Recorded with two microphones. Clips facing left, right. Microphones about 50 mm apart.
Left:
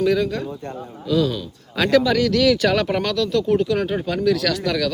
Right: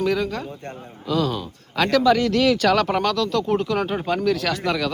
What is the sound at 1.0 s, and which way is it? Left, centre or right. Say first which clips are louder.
Speech: left 2 dB; right.